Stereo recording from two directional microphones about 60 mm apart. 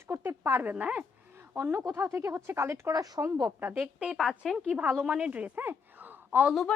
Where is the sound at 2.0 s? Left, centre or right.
Right.